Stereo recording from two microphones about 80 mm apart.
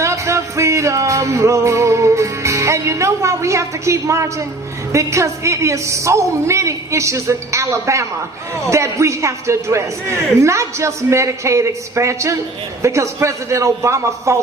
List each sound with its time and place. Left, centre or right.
0.0 s music: right
4.9 s a man's voice: right